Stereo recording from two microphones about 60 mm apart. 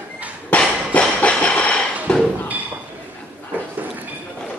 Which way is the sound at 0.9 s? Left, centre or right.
Left.